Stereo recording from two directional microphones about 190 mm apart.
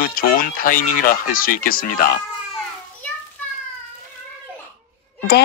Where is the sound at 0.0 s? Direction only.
50° left (ahead or behind).